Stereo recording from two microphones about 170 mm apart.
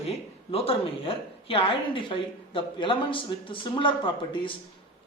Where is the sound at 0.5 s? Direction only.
35° left (ahead or behind).